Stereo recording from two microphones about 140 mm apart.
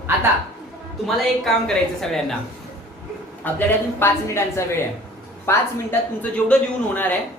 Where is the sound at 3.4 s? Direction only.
15° left (ahead or behind).